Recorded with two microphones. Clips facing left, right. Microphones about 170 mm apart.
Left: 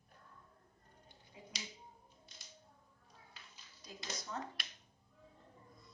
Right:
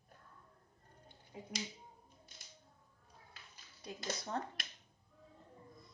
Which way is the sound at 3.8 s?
60° right (ahead or behind).